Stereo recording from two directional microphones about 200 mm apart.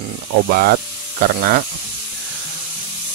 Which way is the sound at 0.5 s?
45° right (ahead or behind).